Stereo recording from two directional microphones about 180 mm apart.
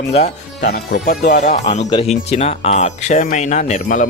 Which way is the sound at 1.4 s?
40° left (ahead or behind).